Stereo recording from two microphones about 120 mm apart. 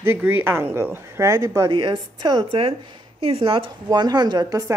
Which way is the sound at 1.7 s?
40° right (ahead or behind).